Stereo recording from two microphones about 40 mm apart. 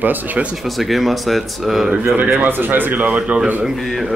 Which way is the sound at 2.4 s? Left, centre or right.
Right.